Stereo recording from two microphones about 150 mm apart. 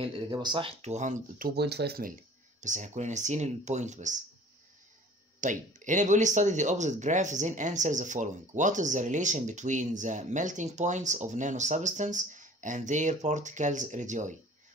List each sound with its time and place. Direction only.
0.0 s speech: 30° right (ahead or behind); by 1.5 s 55° right (ahead or behind)
1.5 s speech: 90° right
2.6 s speech: 55° right (ahead or behind)
5.4 s speech: 55° right (ahead or behind)